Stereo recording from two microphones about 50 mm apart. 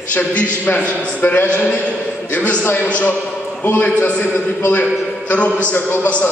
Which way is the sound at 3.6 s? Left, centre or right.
Left.